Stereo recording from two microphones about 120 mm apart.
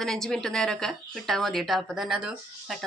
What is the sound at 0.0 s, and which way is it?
Speech, 5° left (ahead or behind).